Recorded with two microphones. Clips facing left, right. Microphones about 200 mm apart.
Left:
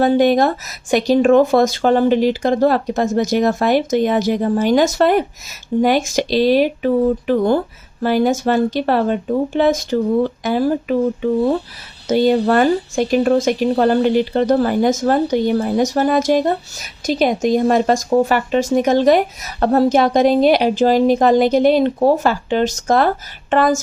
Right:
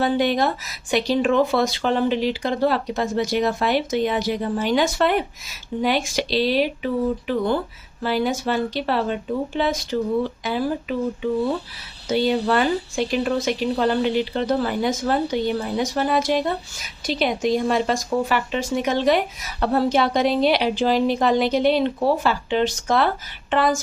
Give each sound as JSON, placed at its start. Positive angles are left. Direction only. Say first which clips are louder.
{"t": 0.0, "sound": "speech", "louder": "left 7 dB", "side_deg": 45}